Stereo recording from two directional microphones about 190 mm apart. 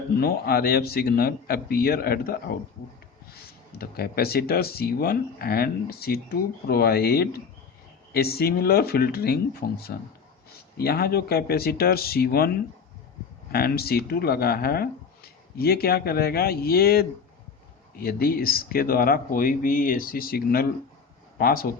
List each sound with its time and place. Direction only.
0.2 s speech: 55° left (ahead or behind)
3.8 s speech: 55° left (ahead or behind)
13.5 s speech: 55° left (ahead or behind)